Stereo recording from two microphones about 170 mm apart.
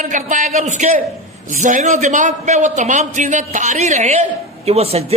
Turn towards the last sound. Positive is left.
turn(degrees=-35)  # may be behind; listen again after turning